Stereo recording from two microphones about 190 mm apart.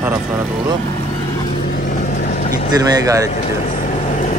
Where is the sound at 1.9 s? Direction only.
45° left (ahead or behind).